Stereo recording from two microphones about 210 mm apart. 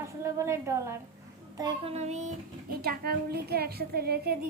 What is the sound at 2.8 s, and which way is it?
A woman's voice, 45° right (ahead or behind).